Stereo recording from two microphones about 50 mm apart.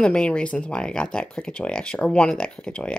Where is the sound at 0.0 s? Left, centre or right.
Left.